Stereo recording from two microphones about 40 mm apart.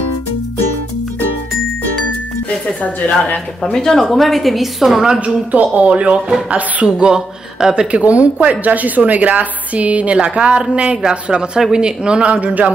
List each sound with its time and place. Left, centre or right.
2.8 s a woman's voice: left
3.7 s a woman's voice: centre
5.2 s a woman's voice: right
7.1 s speech: centre
7.9 s a woman's voice: right